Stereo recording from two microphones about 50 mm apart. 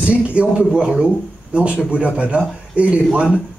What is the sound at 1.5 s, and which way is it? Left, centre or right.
A man's voice, right.